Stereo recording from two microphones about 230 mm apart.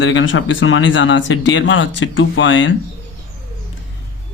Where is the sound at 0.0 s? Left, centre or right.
Left.